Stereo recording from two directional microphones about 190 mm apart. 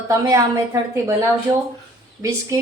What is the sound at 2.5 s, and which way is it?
Speech, 15° right (ahead or behind).